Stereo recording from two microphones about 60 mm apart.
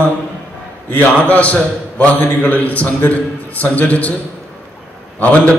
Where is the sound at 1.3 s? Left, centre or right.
Left.